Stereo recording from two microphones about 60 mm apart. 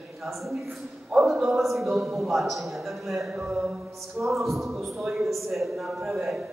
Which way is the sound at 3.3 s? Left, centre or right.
Centre.